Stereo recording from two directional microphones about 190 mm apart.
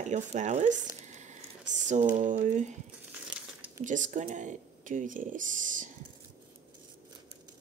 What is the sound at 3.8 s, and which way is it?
Speech, 40° right (ahead or behind).